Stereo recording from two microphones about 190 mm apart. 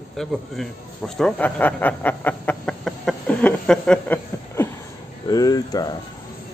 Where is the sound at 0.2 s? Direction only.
Centre (ahead or behind).